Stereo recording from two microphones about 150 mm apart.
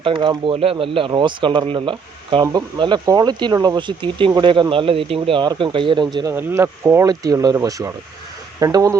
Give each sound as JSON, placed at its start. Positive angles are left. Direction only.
{"t": 0.0, "sound": "speech", "side_deg": -35}
{"t": 6.2, "sound": "speech", "side_deg": -15}